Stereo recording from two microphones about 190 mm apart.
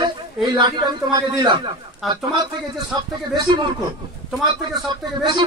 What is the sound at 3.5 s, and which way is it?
Speech, 20° right (ahead or behind).